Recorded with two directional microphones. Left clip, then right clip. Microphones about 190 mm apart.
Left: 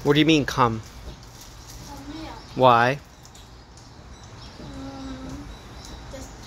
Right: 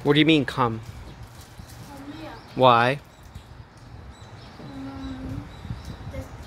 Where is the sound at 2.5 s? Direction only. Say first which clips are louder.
Even; centre (ahead or behind).